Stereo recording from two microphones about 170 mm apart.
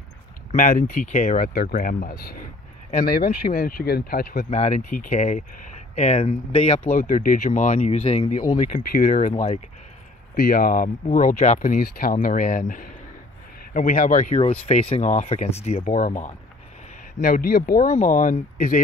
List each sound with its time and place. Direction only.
0.5 s speech: 50° left (ahead or behind)
4.5 s speech: 40° left (ahead or behind)
6.9 s speech: 50° left (ahead or behind)
8.9 s speech: 55° left (ahead or behind)
10.3 s speech: 60° left (ahead or behind); by 11.8 s 45° left (ahead or behind)
11.8 s speech: 55° left (ahead or behind)
14.4 s speech: 35° left (ahead or behind)
17.2 s speech: 60° left (ahead or behind)
17.9 s speech: 50° left (ahead or behind)